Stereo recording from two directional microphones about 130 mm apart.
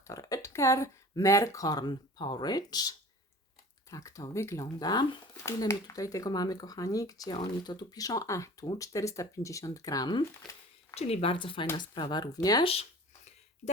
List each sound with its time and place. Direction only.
0.1 s speech: 25° left (ahead or behind)
10.9 s speech: 55° left (ahead or behind); by 12.6 s 30° left (ahead or behind)